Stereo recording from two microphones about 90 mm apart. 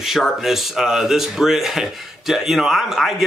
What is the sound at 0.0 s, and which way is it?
Speech, 5° right (ahead or behind).